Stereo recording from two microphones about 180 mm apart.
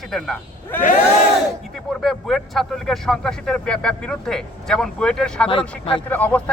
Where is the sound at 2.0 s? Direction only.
Centre (ahead or behind).